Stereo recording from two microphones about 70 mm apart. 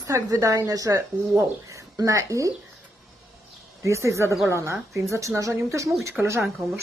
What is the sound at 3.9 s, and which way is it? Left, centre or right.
Speech, right.